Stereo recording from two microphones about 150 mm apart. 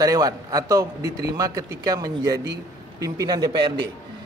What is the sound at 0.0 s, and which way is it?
A man's voice, 25° right (ahead or behind).